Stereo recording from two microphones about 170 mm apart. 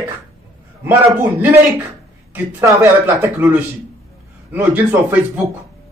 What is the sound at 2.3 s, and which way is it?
Speech, 15° right (ahead or behind).